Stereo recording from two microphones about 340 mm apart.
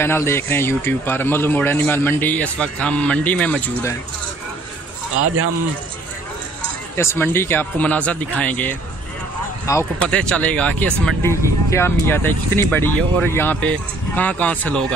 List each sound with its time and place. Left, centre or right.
0.0 s speech: centre
5.1 s speech: right
7.0 s speech: centre